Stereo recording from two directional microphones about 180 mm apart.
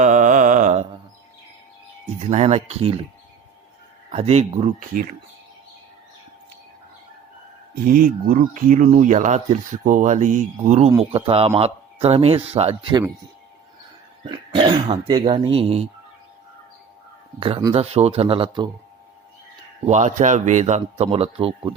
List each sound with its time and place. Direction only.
0.0 s mantra: 45° right (ahead or behind)
2.1 s speech: 40° right (ahead or behind)
4.1 s speech: 35° right (ahead or behind)
7.9 s speech: 50° right (ahead or behind); by 13.0 s 35° right (ahead or behind)
14.3 s speech: 25° right (ahead or behind)
17.7 s speech: 35° right (ahead or behind)
19.8 s speech: 40° right (ahead or behind)